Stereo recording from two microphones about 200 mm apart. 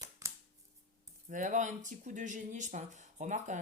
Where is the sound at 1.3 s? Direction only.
40° right (ahead or behind).